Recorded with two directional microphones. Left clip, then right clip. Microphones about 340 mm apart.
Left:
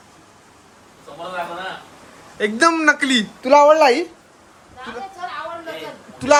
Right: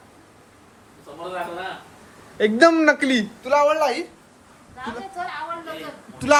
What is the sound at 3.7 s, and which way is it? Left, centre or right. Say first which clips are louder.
Speech: left 8 dB; centre.